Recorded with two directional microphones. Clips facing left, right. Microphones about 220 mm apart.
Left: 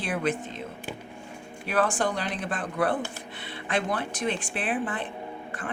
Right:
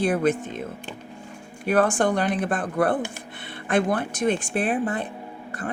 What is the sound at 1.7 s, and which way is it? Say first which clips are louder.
Speech: right 6 dB; 45° right (ahead or behind).